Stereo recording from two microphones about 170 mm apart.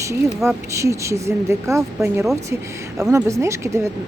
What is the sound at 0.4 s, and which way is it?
A woman's voice, 15° right (ahead or behind).